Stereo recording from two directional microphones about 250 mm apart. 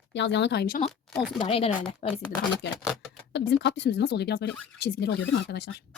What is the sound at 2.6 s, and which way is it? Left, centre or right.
A woman's voice, left.